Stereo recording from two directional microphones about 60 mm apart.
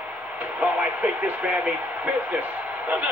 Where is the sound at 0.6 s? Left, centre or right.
Right.